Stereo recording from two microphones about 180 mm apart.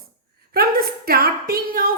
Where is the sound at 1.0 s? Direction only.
55° right (ahead or behind).